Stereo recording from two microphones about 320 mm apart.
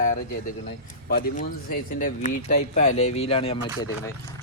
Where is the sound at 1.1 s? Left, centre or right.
Left.